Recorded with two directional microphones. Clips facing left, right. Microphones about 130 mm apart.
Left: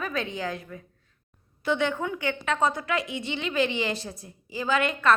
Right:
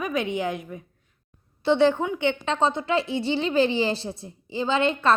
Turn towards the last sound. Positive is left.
turn(degrees=-30)  # may be behind; listen again after turning